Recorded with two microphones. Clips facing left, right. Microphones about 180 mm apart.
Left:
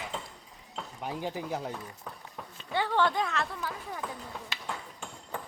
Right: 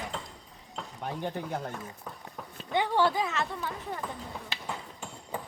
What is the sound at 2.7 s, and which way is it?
Speech, 15° right (ahead or behind).